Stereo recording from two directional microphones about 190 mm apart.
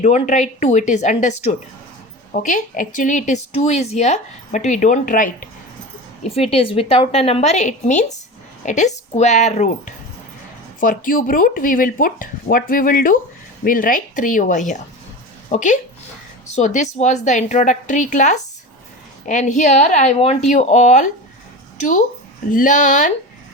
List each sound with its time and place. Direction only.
0.0 s a woman's voice: 40° left (ahead or behind)
6.2 s a woman's voice: 30° left (ahead or behind)